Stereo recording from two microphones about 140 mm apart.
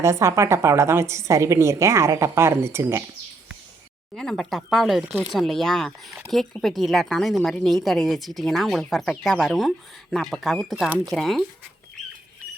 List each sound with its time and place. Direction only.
0.0 s a woman's voice: 20° right (ahead or behind)
4.1 s speech: centre (ahead or behind)
5.0 s speech: 15° right (ahead or behind)
5.3 s speech: centre (ahead or behind)